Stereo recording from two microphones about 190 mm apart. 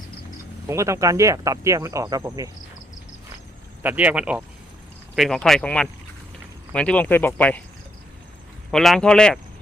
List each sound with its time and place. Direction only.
0.7 s speech: 15° right (ahead or behind)
3.8 s speech: 5° right (ahead or behind); by 7.6 s 10° left (ahead or behind)
8.7 s speech: centre (ahead or behind)